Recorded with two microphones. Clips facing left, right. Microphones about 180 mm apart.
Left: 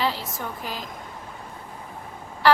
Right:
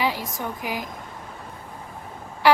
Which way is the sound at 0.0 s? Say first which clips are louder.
Right 1 dB; 15° right (ahead or behind).